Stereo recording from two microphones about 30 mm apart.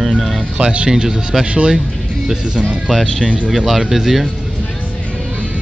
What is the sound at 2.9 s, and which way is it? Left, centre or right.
Speech, centre.